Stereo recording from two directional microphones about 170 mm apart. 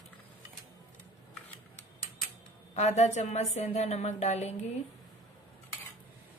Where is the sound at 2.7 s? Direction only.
40° left (ahead or behind).